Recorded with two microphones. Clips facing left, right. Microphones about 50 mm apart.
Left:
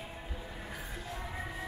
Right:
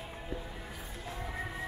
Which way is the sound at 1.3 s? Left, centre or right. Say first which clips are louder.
Right 1 dB; centre.